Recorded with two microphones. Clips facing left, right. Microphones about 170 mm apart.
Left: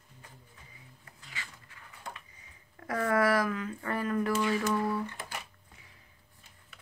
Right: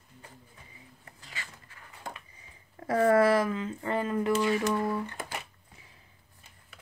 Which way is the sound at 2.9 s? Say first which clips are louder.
Right 5 dB; 30° right (ahead or behind).